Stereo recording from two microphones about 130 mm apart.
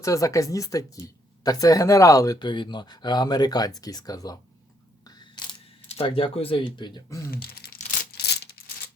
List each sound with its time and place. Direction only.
0.0 s speech: 25° left (ahead or behind)
5.0 s camera: 35° left (ahead or behind)
6.7 s speech: 35° left (ahead or behind)
7.8 s tearing: 65° left (ahead or behind)